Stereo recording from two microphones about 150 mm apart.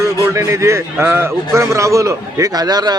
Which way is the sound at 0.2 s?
20° right (ahead or behind).